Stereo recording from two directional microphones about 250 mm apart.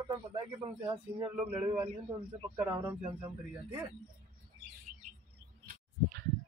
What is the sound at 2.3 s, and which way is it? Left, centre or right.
Speech, centre.